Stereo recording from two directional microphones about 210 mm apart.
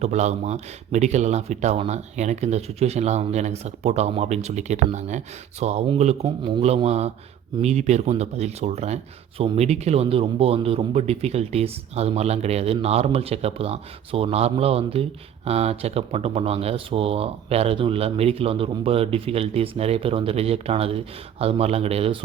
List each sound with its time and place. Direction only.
0.0 s speech: 35° right (ahead or behind)